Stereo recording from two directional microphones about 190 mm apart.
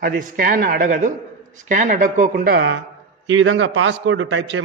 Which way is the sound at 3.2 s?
85° right.